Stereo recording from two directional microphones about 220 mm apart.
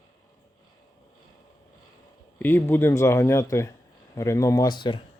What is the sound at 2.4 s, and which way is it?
Speech, 10° left (ahead or behind).